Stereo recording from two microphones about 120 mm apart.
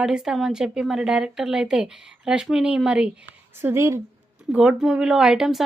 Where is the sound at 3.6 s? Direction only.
20° right (ahead or behind).